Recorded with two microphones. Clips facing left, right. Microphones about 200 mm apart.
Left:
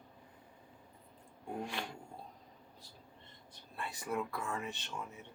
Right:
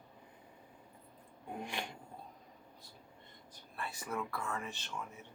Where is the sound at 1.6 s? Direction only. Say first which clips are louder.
Even; 15° right (ahead or behind).